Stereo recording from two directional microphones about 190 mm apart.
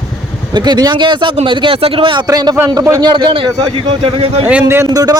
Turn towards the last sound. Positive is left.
turn(degrees=-20)  # may be behind; listen again after turning